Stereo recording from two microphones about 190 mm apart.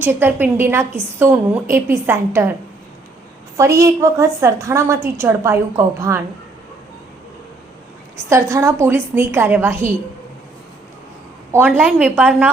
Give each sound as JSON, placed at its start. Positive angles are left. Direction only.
{"t": 0.0, "sound": "a woman's voice", "side_deg": -10}
{"t": 3.6, "sound": "a woman's voice", "side_deg": -15}
{"t": 8.3, "sound": "a woman's voice", "side_deg": -15}
{"t": 11.5, "sound": "a woman's voice", "side_deg": -10}